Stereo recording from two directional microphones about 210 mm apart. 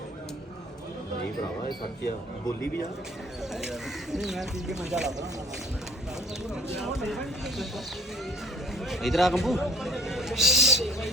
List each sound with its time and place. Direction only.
1.6 s speech: 50° left (ahead or behind)
3.5 s speech: centre (ahead or behind)
6.7 s speech: centre (ahead or behind)
8.8 s speech: centre (ahead or behind)